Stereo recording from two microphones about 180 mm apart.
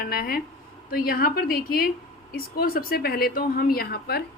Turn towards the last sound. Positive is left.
turn(degrees=60)  # may be behind; listen again after turning